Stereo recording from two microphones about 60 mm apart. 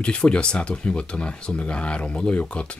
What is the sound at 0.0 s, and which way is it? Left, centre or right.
Speech, centre.